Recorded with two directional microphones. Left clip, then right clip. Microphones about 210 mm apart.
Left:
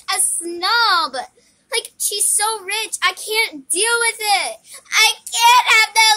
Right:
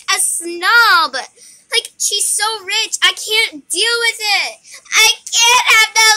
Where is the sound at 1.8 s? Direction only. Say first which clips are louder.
Right 8 dB; 5° left (ahead or behind).